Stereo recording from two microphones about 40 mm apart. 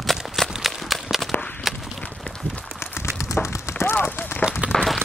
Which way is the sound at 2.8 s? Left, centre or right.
Left.